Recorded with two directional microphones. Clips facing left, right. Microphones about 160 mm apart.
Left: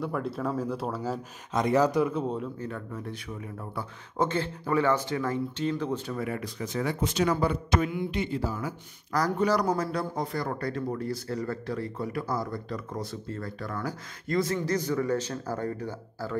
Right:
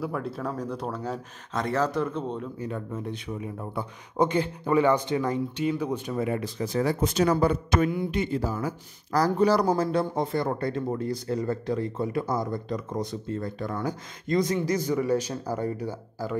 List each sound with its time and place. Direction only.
0.0 s speech: centre (ahead or behind)
1.5 s speech: 15° left (ahead or behind)
2.6 s speech: 20° right (ahead or behind)